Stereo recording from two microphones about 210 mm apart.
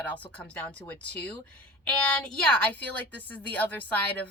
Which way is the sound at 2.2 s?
10° left (ahead or behind).